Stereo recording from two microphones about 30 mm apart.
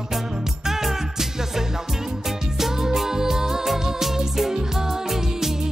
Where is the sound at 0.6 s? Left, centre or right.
Centre.